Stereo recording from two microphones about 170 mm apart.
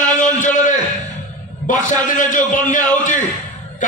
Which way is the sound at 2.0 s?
50° left (ahead or behind).